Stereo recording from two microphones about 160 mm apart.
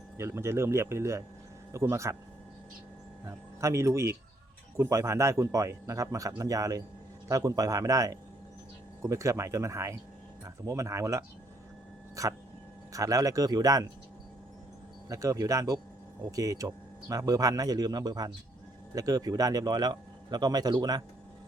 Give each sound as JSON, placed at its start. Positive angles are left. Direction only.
{"t": 0.2, "sound": "speech", "side_deg": -15}
{"t": 3.2, "sound": "speech", "side_deg": -20}
{"t": 15.1, "sound": "speech", "side_deg": -20}